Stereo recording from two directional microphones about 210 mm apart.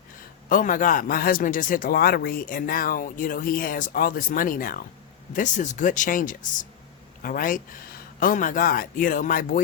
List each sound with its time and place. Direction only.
0.4 s a man's voice: 40° left (ahead or behind)